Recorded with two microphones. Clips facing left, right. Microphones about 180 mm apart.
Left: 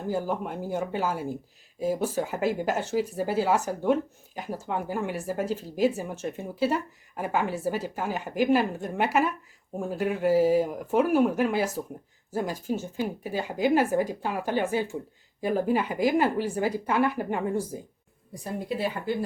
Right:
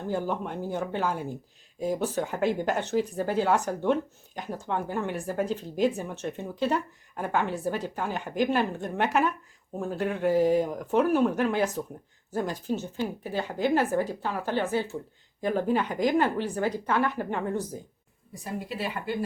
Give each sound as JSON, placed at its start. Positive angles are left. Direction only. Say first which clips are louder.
{"t": 0.1, "sound": "speech", "louder": "left 1 dB", "side_deg": 5}